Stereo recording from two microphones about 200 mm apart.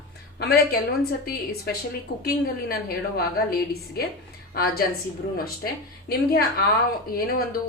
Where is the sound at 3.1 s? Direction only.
50° left (ahead or behind).